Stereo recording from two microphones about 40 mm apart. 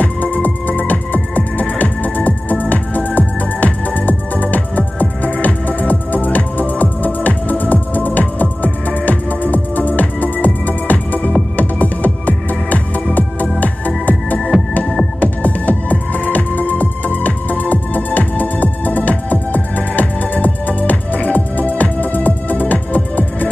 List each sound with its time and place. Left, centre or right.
0.0 s music: left